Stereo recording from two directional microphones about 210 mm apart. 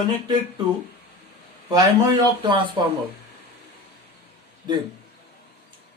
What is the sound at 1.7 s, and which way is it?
Speech, 20° right (ahead or behind).